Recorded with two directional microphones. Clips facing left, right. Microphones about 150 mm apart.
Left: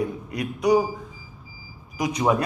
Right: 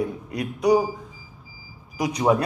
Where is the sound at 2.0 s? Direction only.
35° right (ahead or behind).